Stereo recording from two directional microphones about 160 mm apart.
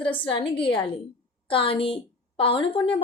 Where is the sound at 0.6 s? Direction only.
30° left (ahead or behind).